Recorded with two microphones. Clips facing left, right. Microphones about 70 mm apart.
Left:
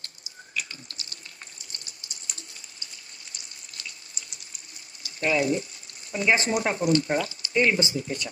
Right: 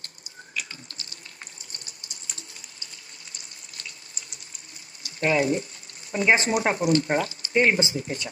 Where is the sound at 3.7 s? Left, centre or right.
Right.